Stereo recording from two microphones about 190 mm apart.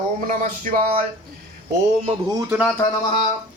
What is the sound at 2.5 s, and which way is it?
Speech, 5° right (ahead or behind).